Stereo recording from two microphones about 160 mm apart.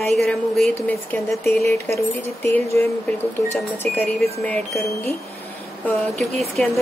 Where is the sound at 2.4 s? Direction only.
15° left (ahead or behind).